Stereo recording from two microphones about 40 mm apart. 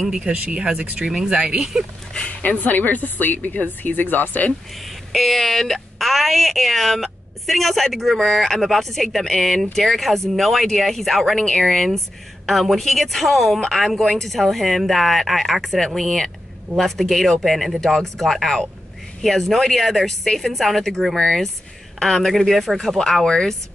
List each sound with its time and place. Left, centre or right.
0.1 s speech: right
2.1 s speech: left
4.7 s speech: centre
23.2 s speech: centre